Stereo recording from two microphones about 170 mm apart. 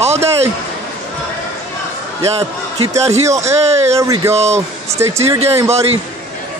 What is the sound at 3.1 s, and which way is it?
Speech, 40° right (ahead or behind).